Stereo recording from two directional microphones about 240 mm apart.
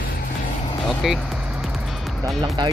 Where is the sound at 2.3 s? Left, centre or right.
Centre.